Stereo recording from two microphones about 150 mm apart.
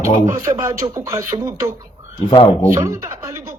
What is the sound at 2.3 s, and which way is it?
Speech, 35° left (ahead or behind).